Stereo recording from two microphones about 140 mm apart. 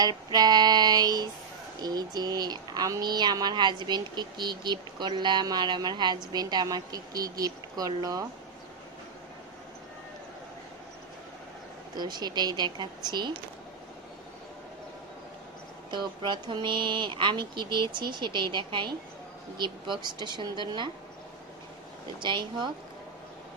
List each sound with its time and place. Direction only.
0.0 s speech: 30° right (ahead or behind)
11.9 s speech: 30° right (ahead or behind)
15.9 s speech: 35° right (ahead or behind)
22.2 s speech: 35° right (ahead or behind)